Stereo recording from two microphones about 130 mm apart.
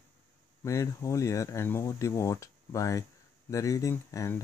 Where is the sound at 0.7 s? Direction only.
25° left (ahead or behind).